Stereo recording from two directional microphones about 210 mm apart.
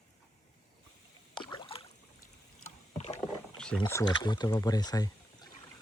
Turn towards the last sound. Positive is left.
turn(degrees=20)  # may be behind; listen again after turning